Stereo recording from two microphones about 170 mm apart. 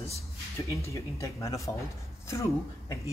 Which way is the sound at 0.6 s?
20° left (ahead or behind).